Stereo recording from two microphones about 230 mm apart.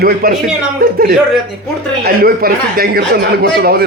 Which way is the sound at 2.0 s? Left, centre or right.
Right.